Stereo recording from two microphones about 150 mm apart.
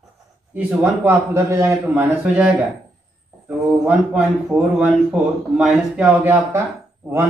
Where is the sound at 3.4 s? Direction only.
10° right (ahead or behind).